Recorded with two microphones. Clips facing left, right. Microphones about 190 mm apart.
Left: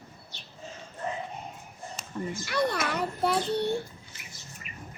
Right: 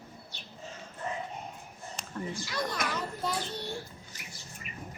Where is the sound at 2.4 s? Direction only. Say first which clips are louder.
Left 8 dB; 65° left (ahead or behind).